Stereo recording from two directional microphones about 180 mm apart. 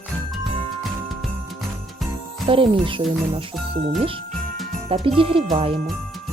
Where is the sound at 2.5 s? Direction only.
30° right (ahead or behind).